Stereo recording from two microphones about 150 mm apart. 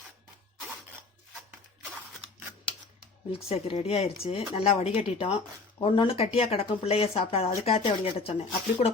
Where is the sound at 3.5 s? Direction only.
40° left (ahead or behind).